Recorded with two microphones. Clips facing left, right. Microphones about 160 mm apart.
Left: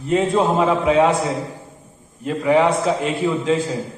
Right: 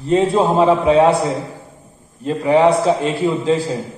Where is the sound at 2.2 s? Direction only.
35° right (ahead or behind).